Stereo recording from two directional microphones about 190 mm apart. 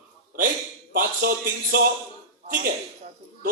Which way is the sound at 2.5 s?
45° right (ahead or behind).